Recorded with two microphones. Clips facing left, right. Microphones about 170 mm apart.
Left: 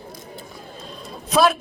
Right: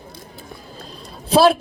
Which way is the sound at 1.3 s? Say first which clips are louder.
Right 4 dB; 30° right (ahead or behind).